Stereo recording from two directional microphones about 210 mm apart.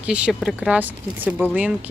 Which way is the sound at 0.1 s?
5° right (ahead or behind).